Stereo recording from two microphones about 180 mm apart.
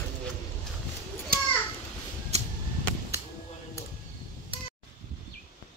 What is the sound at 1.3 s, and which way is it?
Children playing, 55° right (ahead or behind).